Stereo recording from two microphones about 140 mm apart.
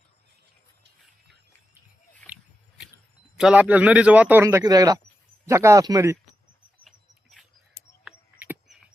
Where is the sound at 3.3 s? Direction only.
5° right (ahead or behind).